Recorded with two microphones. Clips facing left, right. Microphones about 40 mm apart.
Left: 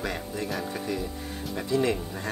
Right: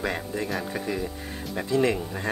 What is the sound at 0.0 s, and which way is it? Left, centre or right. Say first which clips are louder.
Speech: right 3 dB; centre.